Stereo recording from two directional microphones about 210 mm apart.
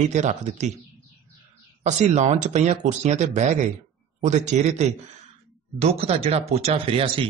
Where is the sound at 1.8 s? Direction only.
35° right (ahead or behind).